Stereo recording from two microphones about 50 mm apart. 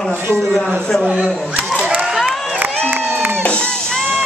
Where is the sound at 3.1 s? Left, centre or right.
Right.